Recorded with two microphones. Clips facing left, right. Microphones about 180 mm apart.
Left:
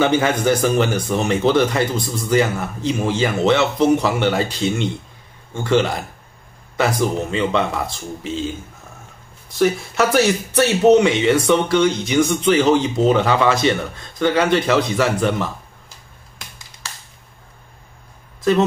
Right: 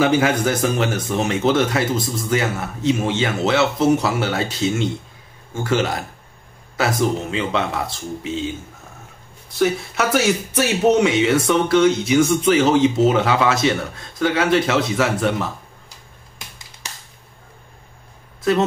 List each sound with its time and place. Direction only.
0.0 s speech: 5° right (ahead or behind)
9.6 s speech: centre (ahead or behind)
16.8 s a sound: 20° right (ahead or behind)